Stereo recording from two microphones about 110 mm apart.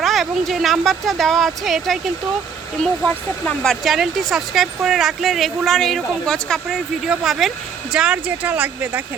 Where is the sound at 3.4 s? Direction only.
5° left (ahead or behind); by 9.0 s 15° right (ahead or behind).